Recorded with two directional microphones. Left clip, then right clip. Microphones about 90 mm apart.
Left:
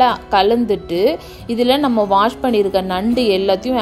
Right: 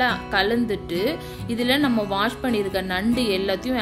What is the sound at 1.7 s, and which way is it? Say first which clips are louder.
A woman's voice: left 8 dB; 60° left (ahead or behind).